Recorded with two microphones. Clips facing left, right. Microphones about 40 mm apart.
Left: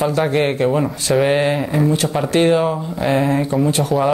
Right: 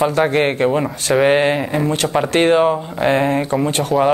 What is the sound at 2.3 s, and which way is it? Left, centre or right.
Speech, right.